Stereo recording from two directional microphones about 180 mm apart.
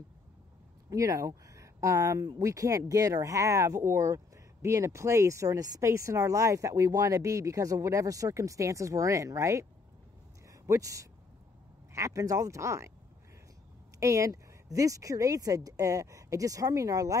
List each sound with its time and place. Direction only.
0.8 s speech: 20° right (ahead or behind)
10.7 s speech: 20° right (ahead or behind)
13.9 s speech: 20° right (ahead or behind)